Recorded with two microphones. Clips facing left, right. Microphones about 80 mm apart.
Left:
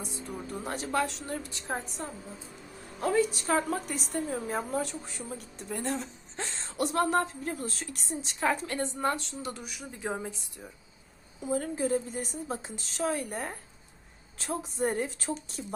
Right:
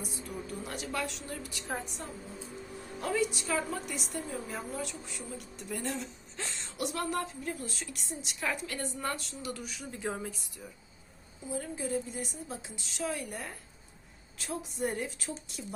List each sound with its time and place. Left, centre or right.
0.5 s a woman's voice: left
11.4 s a woman's voice: left